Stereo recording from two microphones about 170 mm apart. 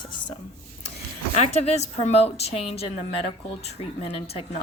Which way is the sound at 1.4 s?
40° left (ahead or behind).